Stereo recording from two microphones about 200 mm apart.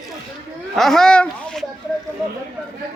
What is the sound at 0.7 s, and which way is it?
Speech, centre (ahead or behind).